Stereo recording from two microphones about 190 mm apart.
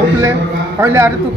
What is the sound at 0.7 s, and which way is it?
Speech, 15° right (ahead or behind).